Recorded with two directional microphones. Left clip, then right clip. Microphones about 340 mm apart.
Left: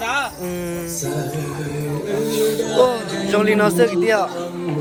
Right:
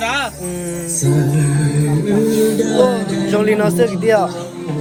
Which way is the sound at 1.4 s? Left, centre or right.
Right.